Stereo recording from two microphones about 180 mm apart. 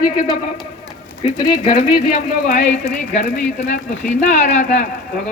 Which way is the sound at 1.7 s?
45° left (ahead or behind).